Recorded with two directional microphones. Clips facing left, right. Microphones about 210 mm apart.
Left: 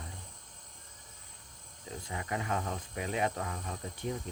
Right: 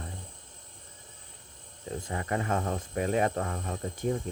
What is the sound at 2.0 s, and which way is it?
Speech, 45° right (ahead or behind).